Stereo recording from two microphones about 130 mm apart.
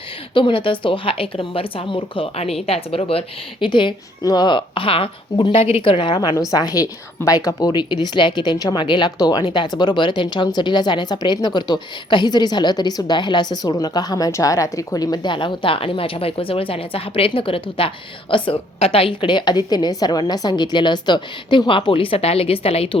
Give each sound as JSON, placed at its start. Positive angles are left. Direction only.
{"t": 0.3, "sound": "a woman's voice", "side_deg": 40}